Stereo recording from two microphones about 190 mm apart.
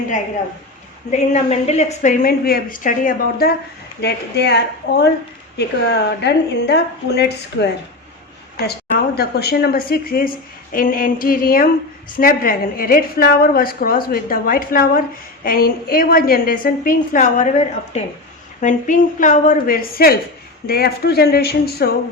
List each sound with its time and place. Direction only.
1.1 s a woman's voice: 35° left (ahead or behind)
4.0 s a woman's voice: 60° left (ahead or behind)
9.1 s a woman's voice: 55° left (ahead or behind)